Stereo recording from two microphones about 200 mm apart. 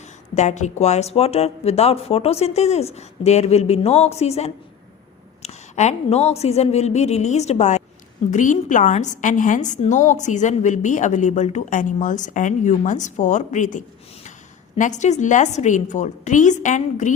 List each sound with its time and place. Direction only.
0.3 s a woman's voice: 35° left (ahead or behind)